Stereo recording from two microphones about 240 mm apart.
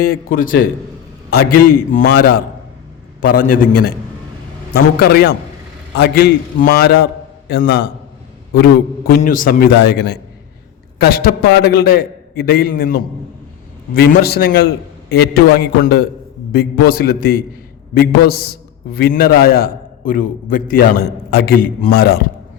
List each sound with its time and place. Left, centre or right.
0.0 s a man's voice: left
3.2 s a man's voice: left
4.9 s a man's voice: left